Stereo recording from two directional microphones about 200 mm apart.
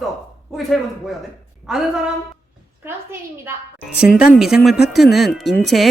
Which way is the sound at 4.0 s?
5° right (ahead or behind).